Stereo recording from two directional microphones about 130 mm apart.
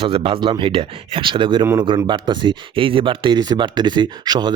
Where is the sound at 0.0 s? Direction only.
45° right (ahead or behind).